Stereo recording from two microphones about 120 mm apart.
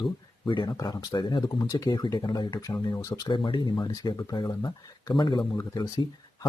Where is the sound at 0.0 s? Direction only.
40° left (ahead or behind).